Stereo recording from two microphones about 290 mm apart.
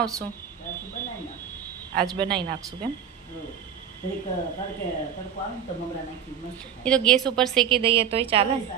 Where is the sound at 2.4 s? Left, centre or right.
Centre.